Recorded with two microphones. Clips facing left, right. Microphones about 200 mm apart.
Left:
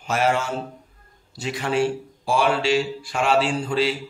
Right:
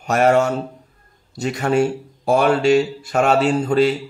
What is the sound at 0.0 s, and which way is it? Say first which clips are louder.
Speech: right 6 dB; 45° right (ahead or behind).